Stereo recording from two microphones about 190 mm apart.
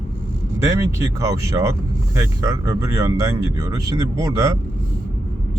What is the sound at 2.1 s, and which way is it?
Speech, 15° right (ahead or behind).